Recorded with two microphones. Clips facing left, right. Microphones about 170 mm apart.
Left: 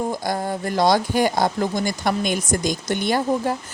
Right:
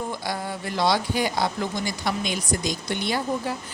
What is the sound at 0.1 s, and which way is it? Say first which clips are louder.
A woman's voice: left 6 dB; 45° left (ahead or behind).